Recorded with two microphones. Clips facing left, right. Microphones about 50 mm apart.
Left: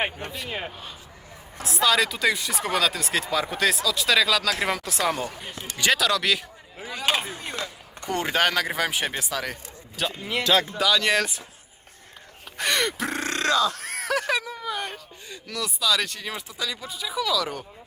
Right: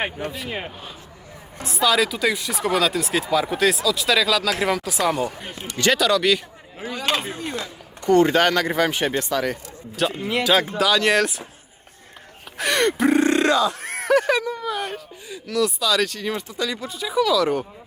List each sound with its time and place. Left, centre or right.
0.0 s speech: centre
1.6 s speech: centre
6.9 s chop: centre
8.1 s speech: centre
12.5 s grunt: centre
13.2 s burping: centre
13.8 s speech: centre